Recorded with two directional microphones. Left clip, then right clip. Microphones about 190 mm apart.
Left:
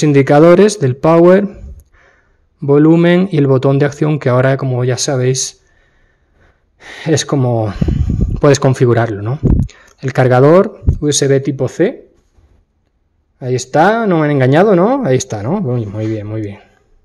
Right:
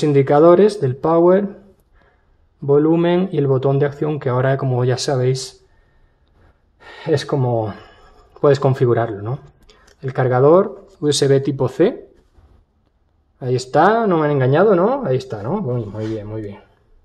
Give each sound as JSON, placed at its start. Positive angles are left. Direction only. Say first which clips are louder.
{"t": 0.0, "sound": "speech", "louder": "left 4 dB", "side_deg": 30}
{"t": 2.6, "sound": "speech", "louder": "left 5 dB", "side_deg": 30}
{"t": 6.8, "sound": "speech", "louder": "left 4 dB", "side_deg": 45}
{"t": 11.0, "sound": "speech", "louder": "left 3 dB", "side_deg": 20}
{"t": 13.4, "sound": "speech", "louder": "left 3 dB", "side_deg": 20}